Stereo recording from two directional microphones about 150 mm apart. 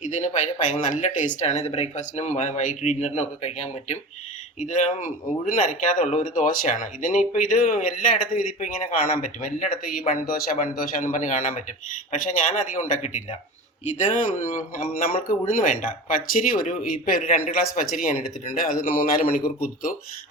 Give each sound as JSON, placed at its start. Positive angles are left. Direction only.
{"t": 0.0, "sound": "speech", "side_deg": 55}
{"t": 13.8, "sound": "speech", "side_deg": 55}
{"t": 18.9, "sound": "speech", "side_deg": 70}